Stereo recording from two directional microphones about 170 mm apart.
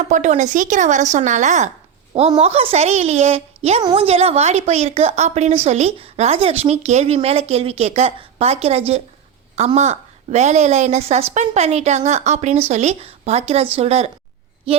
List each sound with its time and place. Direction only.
0.0 s speech: 45° right (ahead or behind)